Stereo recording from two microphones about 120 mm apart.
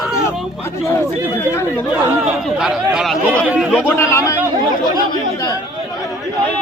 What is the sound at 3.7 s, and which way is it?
Speech, 20° left (ahead or behind).